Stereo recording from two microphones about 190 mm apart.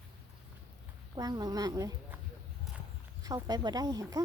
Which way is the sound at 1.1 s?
20° right (ahead or behind).